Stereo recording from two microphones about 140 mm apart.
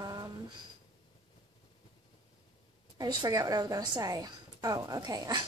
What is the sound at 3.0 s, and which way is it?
A woman's voice, 30° right (ahead or behind).